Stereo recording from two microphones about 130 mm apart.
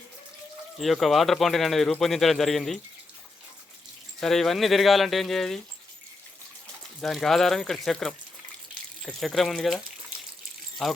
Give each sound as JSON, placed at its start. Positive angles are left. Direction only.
{"t": 0.8, "sound": "speech", "side_deg": 0}
{"t": 4.2, "sound": "speech", "side_deg": 0}
{"t": 7.0, "sound": "speech", "side_deg": 5}